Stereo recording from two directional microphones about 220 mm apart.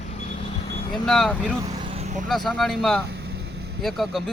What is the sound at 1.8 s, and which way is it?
Vehicle, 30° right (ahead or behind).